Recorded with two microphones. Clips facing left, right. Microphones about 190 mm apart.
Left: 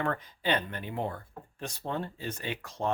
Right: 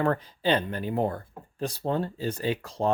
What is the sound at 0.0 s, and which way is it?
Speech, 35° right (ahead or behind).